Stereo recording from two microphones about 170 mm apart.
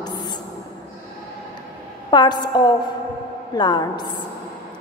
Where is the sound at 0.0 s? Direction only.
25° left (ahead or behind).